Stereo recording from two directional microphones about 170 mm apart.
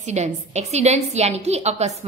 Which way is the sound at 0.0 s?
40° right (ahead or behind).